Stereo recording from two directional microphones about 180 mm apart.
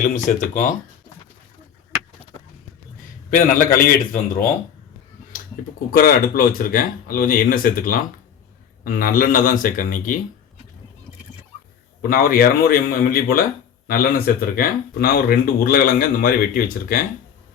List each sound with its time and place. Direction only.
0.0 s speech: 45° left (ahead or behind)
3.2 s speech: 50° left (ahead or behind)
5.9 s speech: 55° left (ahead or behind)
12.0 s speech: 55° left (ahead or behind)